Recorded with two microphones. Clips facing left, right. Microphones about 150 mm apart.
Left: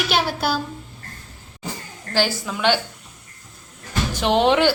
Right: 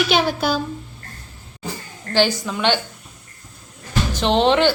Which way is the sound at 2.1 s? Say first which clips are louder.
Right 3 dB; 5° left (ahead or behind).